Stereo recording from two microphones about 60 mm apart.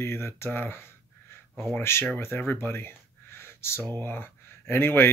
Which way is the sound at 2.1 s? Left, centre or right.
Left.